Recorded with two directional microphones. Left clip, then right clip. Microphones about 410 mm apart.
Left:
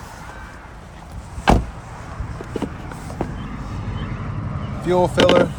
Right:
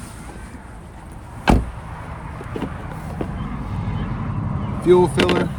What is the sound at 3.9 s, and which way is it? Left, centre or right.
Vehicle, centre.